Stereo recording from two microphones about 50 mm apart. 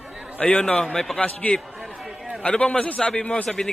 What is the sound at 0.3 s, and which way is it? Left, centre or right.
Speech, left.